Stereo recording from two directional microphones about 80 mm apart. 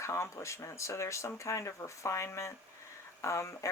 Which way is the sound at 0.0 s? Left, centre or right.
Left.